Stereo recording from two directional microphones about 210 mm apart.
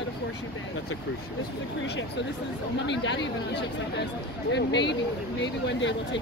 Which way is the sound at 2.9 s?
55° left (ahead or behind).